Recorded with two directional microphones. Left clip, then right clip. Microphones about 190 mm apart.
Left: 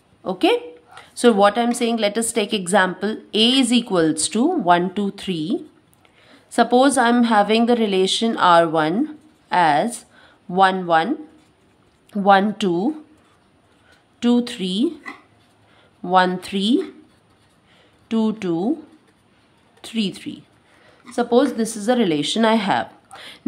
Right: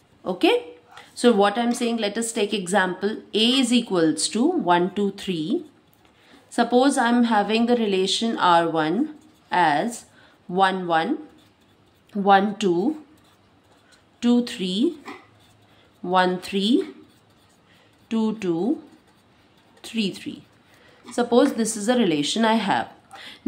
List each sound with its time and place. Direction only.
0.2 s a woman's voice: 20° left (ahead or behind)
14.2 s speech: 25° left (ahead or behind)
16.0 s speech: 25° left (ahead or behind)
18.0 s speech: 25° left (ahead or behind)
19.8 s speech: 25° left (ahead or behind)